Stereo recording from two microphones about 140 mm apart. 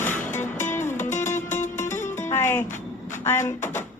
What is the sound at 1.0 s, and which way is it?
Music, 60° left (ahead or behind).